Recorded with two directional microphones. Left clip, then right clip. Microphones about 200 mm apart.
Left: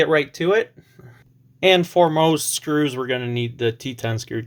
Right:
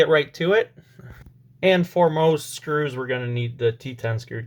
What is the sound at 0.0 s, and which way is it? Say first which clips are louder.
Speech: even; 15° left (ahead or behind).